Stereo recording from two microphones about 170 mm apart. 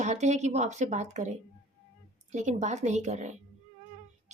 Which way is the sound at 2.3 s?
45° right (ahead or behind).